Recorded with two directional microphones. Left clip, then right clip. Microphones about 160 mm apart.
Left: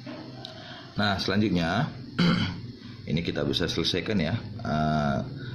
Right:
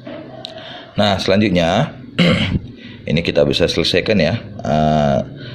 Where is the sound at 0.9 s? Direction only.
20° right (ahead or behind).